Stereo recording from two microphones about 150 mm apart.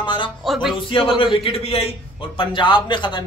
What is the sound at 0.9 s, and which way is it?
Speech, 35° left (ahead or behind).